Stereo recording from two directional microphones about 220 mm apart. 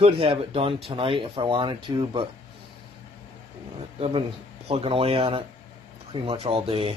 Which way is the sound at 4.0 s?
25° right (ahead or behind).